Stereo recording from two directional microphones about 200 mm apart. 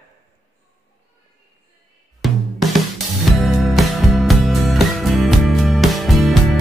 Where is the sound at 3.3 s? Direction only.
Centre (ahead or behind).